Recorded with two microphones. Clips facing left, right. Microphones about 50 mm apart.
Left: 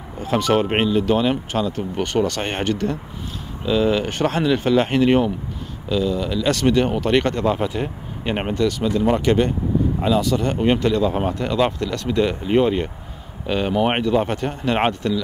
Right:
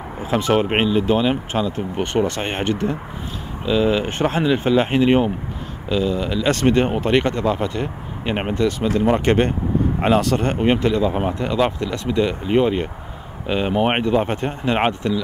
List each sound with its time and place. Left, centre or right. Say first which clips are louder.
0.2 s speech: even; centre
5.9 s speech: right 1 dB; right
7.4 s speech: even; centre
8.5 s speech: even; right
9.1 s speech: right 1 dB; right
10.6 s a man's voice: even; centre
12.2 s speech: even; centre
13.5 s speech: right 1 dB; centre
15.0 s a man's voice: even; centre